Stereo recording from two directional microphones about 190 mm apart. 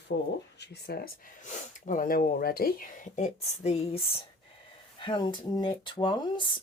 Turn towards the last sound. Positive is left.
turn(degrees=25)  # may be behind; listen again after turning